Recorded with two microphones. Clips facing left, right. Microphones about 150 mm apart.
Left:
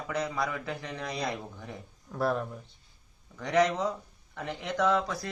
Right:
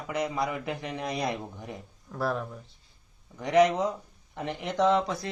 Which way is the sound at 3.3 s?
20° right (ahead or behind).